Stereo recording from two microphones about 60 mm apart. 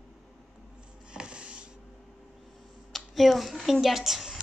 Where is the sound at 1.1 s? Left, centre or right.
Centre.